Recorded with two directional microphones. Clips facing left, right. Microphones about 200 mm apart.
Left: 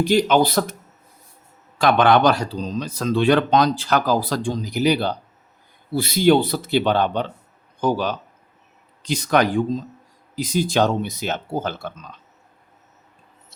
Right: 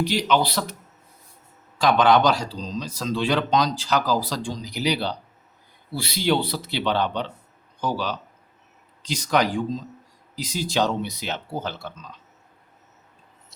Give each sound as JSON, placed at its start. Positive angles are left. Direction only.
{"t": 0.0, "sound": "speech", "side_deg": 50}
{"t": 1.8, "sound": "speech", "side_deg": 55}